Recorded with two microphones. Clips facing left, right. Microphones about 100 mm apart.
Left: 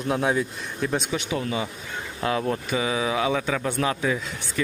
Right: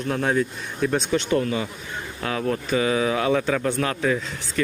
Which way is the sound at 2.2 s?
25° left (ahead or behind).